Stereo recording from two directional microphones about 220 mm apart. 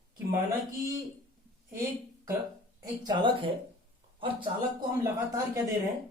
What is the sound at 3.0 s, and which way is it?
Speech, 20° right (ahead or behind).